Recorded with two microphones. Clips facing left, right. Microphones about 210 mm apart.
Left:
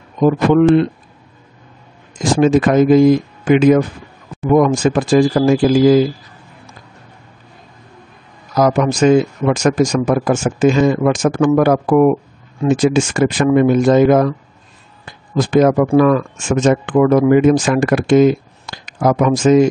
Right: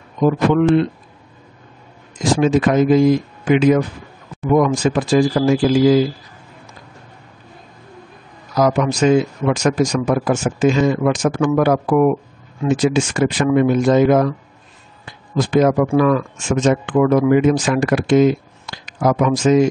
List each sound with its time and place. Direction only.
2.1 s speech: 50° left (ahead or behind)
8.5 s speech: 45° left (ahead or behind)